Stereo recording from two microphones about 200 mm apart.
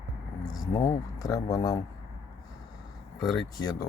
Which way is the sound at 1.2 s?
15° left (ahead or behind).